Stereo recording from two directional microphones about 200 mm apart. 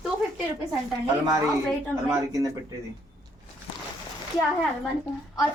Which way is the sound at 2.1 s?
15° right (ahead or behind).